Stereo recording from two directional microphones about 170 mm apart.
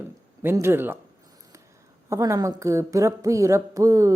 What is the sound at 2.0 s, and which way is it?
Speech, 20° right (ahead or behind).